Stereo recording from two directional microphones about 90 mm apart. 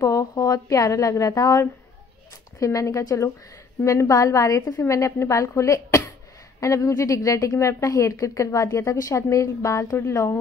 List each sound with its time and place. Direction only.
0.0 s a woman's voice: 40° left (ahead or behind)